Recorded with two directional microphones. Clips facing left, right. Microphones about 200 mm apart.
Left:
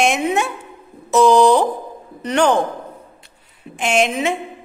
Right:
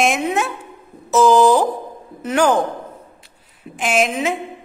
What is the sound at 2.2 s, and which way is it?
Speech, 5° right (ahead or behind).